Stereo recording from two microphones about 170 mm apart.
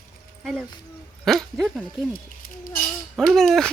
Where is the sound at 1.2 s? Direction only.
Centre (ahead or behind).